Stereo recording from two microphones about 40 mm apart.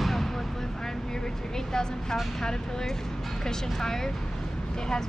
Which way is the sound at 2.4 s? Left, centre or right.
Centre.